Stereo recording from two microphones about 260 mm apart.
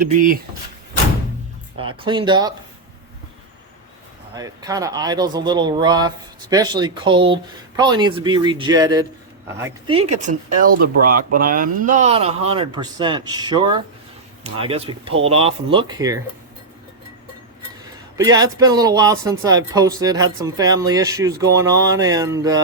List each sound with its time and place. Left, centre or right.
0.0 s speech: right
1.8 s speech: centre
4.4 s speech: centre
10.2 s speech: right; by 16.2 s centre
18.2 s speech: centre